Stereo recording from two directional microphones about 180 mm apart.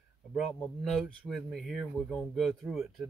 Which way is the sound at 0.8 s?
5° left (ahead or behind).